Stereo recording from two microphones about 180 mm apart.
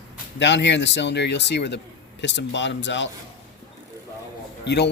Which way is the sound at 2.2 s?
85° left.